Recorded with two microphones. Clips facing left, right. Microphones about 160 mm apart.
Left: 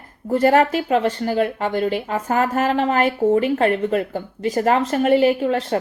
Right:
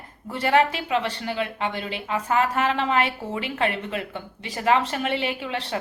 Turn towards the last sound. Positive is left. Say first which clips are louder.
# left 11 dB
turn(degrees=45)  # may be behind; listen again after turning